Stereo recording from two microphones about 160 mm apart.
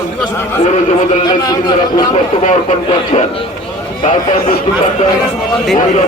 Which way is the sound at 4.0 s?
45° left (ahead or behind).